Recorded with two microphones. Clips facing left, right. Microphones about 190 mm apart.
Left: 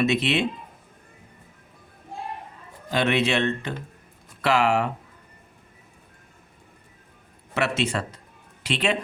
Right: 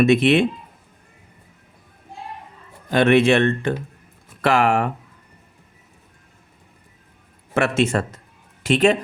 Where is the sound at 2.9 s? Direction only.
50° right (ahead or behind).